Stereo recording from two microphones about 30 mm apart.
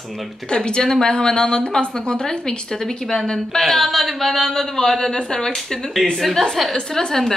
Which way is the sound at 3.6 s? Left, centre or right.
Centre.